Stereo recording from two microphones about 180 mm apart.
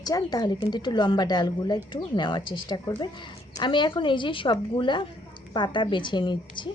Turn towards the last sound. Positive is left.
turn(degrees=25)  # may be behind; listen again after turning